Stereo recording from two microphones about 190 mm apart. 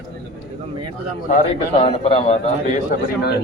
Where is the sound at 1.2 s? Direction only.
35° left (ahead or behind).